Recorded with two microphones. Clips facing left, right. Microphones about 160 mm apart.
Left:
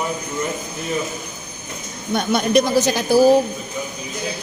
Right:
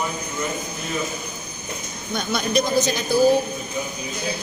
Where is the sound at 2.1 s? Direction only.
65° left (ahead or behind); by 3.4 s 80° left.